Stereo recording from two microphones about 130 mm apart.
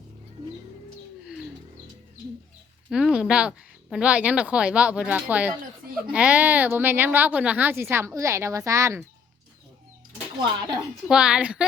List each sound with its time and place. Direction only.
2.9 s speech: 5° right (ahead or behind); by 9.0 s 20° right (ahead or behind)
10.3 s speech: 35° right (ahead or behind)
11.1 s speech: 5° right (ahead or behind)